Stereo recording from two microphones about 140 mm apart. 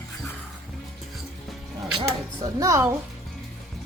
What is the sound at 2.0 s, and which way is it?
Speech, 25° right (ahead or behind).